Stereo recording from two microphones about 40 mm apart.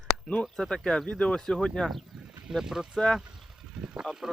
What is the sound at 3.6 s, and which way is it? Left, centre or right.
Speech, centre.